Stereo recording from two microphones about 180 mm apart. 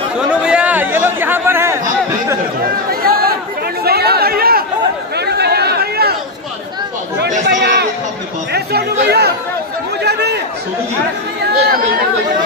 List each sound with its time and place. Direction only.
0.3 s chatter: 5° right (ahead or behind)
2.6 s chatter: 55° right (ahead or behind)
7.2 s chatter: 70° right (ahead or behind)
8.5 s speech: 65° right (ahead or behind)
10.0 s chatter: 65° right (ahead or behind)